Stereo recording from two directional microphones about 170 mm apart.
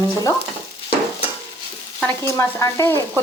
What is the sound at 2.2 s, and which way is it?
Speech, 15° left (ahead or behind).